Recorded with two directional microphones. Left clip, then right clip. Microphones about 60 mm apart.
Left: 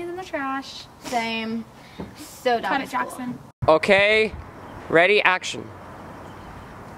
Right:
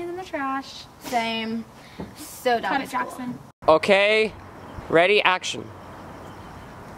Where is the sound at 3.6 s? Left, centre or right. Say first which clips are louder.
Left 1 dB; centre.